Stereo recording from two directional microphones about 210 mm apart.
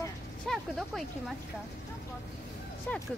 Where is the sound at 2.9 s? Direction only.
5° left (ahead or behind).